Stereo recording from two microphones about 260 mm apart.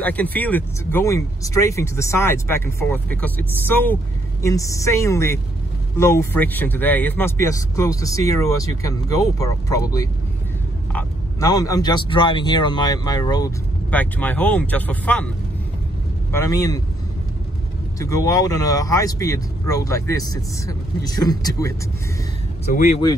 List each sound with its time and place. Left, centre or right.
0.0 s speech: centre
16.3 s speech: centre
17.9 s speech: centre
22.7 s speech: left